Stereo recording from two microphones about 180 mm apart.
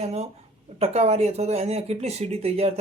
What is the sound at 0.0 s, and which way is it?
Speech, 35° right (ahead or behind).